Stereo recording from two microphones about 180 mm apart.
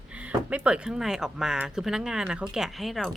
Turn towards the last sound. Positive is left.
turn(degrees=0)  # may be behind; listen again after turning